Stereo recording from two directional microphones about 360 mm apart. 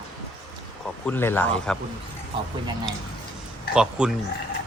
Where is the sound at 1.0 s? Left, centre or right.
Centre.